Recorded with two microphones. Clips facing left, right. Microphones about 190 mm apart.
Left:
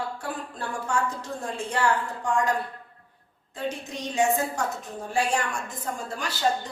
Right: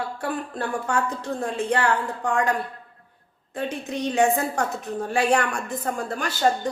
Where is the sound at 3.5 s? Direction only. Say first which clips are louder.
Right 4 dB; 60° right (ahead or behind).